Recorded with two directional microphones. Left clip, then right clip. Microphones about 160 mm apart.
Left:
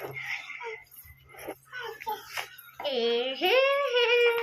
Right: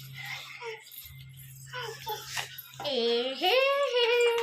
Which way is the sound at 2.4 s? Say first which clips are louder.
Even; 25° right (ahead or behind).